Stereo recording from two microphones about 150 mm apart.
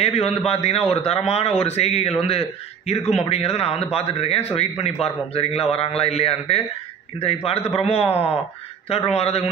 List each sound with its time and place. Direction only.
0.0 s a man's voice: 45° left (ahead or behind)